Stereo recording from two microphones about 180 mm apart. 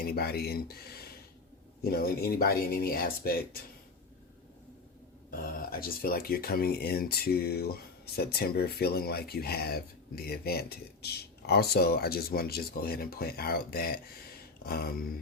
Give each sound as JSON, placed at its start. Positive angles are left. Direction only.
{"t": 0.0, "sound": "speech", "side_deg": 60}
{"t": 5.4, "sound": "speech", "side_deg": 55}
{"t": 14.6, "sound": "a sound", "side_deg": 55}